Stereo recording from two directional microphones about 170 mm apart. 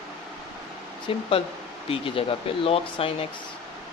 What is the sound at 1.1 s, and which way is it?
Speech, 30° left (ahead or behind).